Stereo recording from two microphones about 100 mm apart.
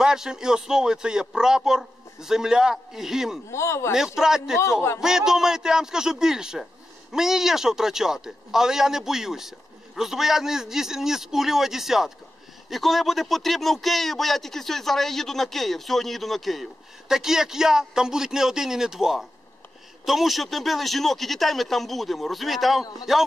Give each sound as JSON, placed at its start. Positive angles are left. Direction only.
{"t": 0.0, "sound": "speech", "side_deg": -5}
{"t": 3.4, "sound": "speech", "side_deg": 30}
{"t": 3.9, "sound": "speech", "side_deg": -5}